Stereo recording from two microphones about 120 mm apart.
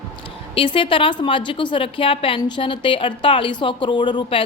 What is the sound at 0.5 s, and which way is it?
A woman's voice, 45° left (ahead or behind).